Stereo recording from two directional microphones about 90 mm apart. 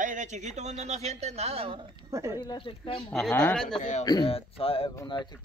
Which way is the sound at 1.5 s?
90° right.